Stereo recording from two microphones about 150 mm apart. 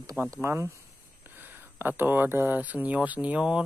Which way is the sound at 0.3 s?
20° right (ahead or behind).